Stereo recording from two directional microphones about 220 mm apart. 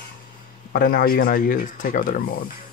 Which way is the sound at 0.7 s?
40° left (ahead or behind).